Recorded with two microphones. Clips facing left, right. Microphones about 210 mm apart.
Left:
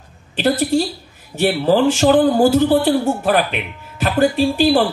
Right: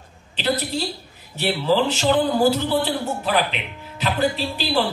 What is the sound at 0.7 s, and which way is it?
A man's voice, 50° left (ahead or behind).